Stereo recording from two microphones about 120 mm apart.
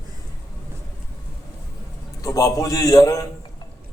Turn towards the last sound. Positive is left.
turn(degrees=30)  # may be behind; listen again after turning